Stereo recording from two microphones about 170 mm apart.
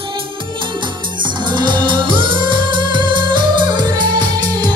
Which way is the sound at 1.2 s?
25° right (ahead or behind).